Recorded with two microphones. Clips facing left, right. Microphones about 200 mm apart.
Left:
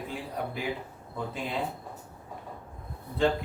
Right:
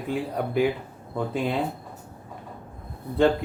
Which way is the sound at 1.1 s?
60° right (ahead or behind).